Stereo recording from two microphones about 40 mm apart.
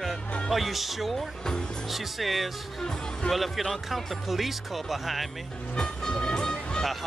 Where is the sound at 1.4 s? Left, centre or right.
Centre.